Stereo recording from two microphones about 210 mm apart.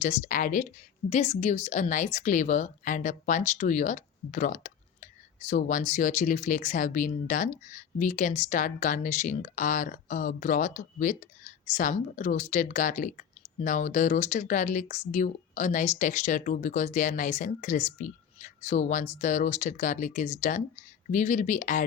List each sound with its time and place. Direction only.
0.0 s speech: 35° left (ahead or behind)